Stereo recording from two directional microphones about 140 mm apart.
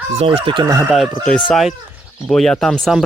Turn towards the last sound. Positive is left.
turn(degrees=0)  # may be behind; listen again after turning